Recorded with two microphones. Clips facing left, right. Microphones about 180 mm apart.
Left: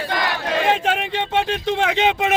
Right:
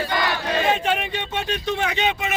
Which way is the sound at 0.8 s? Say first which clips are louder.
Left 2 dB; 90° left.